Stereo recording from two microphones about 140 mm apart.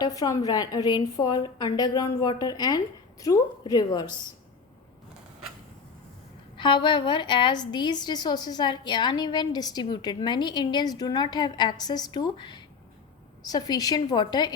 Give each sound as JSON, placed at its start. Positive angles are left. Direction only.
{"t": 0.0, "sound": "a woman's voice", "side_deg": 25}
{"t": 6.6, "sound": "a woman's voice", "side_deg": 35}